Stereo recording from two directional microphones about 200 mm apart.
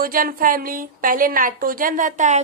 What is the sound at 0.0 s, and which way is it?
Speech, 45° right (ahead or behind).